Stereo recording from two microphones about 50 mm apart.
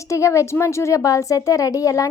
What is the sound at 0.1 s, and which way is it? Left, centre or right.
A woman's voice, left.